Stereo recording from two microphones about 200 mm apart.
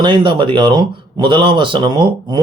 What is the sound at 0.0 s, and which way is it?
A man's voice, 25° right (ahead or behind).